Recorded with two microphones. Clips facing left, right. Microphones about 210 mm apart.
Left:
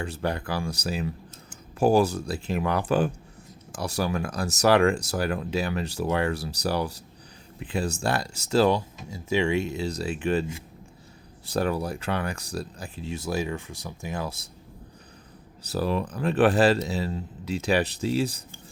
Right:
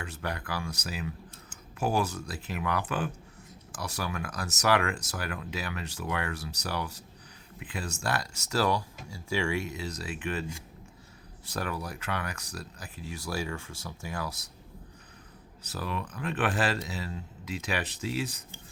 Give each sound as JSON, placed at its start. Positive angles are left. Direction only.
{"t": 0.0, "sound": "speech", "side_deg": 30}
{"t": 15.7, "sound": "speech", "side_deg": 35}